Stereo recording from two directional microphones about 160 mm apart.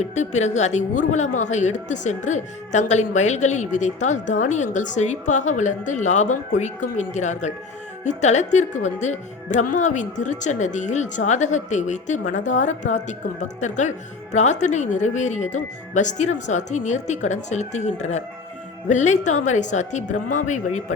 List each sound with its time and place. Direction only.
0.0 s speech: 45° left (ahead or behind)